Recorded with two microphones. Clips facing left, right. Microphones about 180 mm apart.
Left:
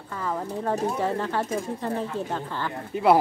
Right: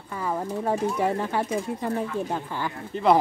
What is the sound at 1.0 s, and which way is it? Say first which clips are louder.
Speech: right 1 dB; 15° right (ahead or behind).